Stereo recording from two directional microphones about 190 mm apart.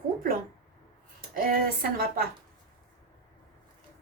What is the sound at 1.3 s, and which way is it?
Speech, 50° right (ahead or behind).